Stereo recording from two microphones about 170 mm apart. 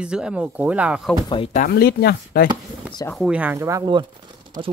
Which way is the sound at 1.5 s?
65° left (ahead or behind).